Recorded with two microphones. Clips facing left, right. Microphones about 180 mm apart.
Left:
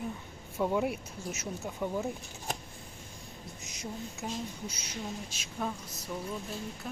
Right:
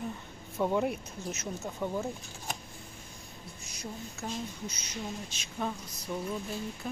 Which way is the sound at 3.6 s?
20° left (ahead or behind).